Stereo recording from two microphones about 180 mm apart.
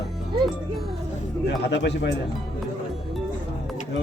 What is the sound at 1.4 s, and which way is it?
Speech, 75° left (ahead or behind).